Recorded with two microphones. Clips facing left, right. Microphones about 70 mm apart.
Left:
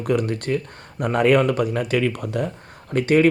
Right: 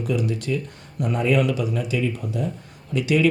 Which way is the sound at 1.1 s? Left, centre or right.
Left.